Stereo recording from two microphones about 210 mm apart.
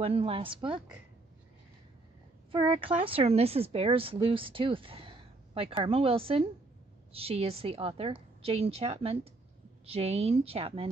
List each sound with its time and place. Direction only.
0.0 s speech: 25° right (ahead or behind)
2.5 s speech: 25° right (ahead or behind)